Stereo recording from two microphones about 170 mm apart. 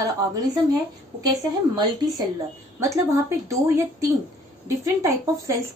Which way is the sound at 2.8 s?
20° right (ahead or behind).